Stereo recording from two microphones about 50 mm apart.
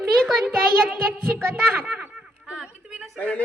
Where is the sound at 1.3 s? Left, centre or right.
Right.